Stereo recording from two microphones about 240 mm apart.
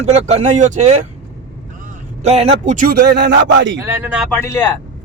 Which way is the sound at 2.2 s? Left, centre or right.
Right.